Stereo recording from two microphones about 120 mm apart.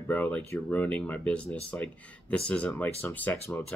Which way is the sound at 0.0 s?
15° left (ahead or behind).